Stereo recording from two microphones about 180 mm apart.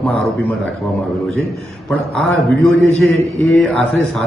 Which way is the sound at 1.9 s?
5° left (ahead or behind).